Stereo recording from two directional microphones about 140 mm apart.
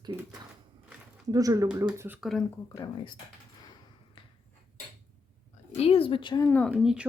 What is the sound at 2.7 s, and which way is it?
Speech, 35° left (ahead or behind).